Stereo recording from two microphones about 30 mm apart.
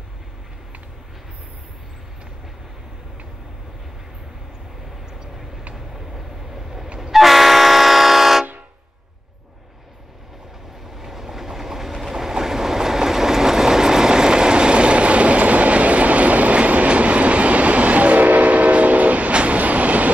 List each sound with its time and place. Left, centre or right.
5.9 s train: centre
11.0 s train: centre; by 20.1 s right